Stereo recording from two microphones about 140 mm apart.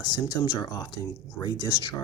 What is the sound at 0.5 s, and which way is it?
Speech, 30° left (ahead or behind).